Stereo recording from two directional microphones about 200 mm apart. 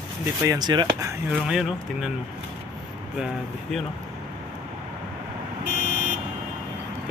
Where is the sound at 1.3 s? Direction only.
5° right (ahead or behind).